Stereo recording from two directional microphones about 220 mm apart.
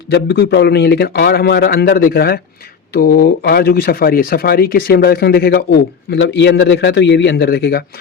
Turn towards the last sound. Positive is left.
turn(degrees=45)  # may be behind; listen again after turning